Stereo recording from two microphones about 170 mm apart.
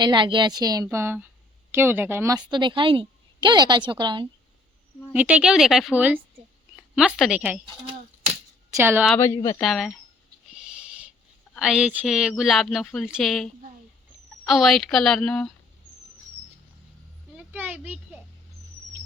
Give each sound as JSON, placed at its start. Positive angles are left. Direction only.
{"t": 0.0, "sound": "a woman's voice", "side_deg": -25}
{"t": 5.1, "sound": "speech", "side_deg": -10}
{"t": 8.7, "sound": "speech", "side_deg": -15}
{"t": 9.1, "sound": "speech", "side_deg": 15}
{"t": 9.6, "sound": "speech", "side_deg": 0}
{"t": 11.6, "sound": "speech", "side_deg": -5}
{"t": 17.3, "sound": "a sound", "side_deg": -5}